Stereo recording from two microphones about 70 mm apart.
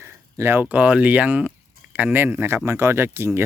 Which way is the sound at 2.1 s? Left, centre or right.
Right.